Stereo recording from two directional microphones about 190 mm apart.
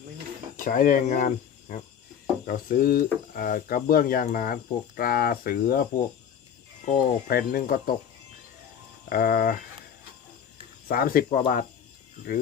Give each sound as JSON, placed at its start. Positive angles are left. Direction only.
{"t": 0.5, "sound": "speech", "side_deg": 45}
{"t": 6.8, "sound": "speech", "side_deg": 45}
{"t": 9.0, "sound": "speech", "side_deg": 50}
{"t": 10.8, "sound": "speech", "side_deg": 50}